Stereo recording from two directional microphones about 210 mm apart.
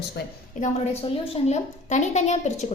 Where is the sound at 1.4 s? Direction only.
35° left (ahead or behind).